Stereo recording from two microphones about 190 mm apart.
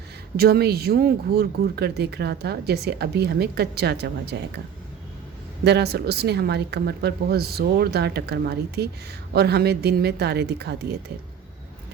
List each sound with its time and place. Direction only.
0.3 s speech: 55° right (ahead or behind)
5.6 s speech: 60° right (ahead or behind)